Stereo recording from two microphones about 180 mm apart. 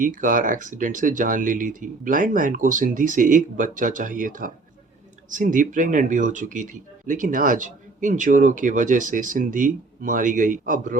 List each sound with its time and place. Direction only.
0.0 s speech: 45° right (ahead or behind)